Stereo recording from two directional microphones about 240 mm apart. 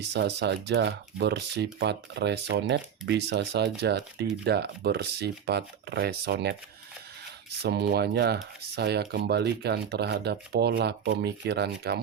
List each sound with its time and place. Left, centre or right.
0.1 s speech: right
7.6 s speech: right